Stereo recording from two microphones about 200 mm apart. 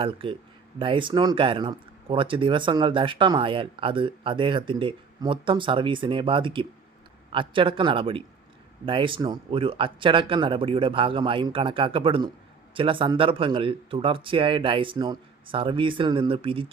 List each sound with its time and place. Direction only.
0.0 s speech: 25° right (ahead or behind)